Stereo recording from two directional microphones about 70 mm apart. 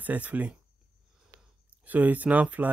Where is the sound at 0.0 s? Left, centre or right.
Right.